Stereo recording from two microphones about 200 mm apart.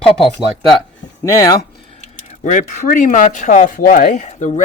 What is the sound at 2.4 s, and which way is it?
Speech, 40° left (ahead or behind).